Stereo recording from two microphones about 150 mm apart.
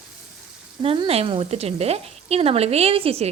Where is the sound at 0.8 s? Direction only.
35° right (ahead or behind).